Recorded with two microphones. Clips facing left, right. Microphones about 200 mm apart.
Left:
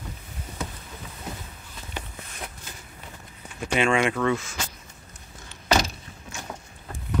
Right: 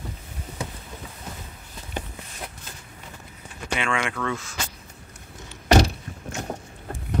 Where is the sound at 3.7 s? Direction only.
25° left (ahead or behind).